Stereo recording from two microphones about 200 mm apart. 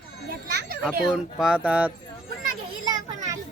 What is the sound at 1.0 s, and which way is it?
Speech, centre (ahead or behind).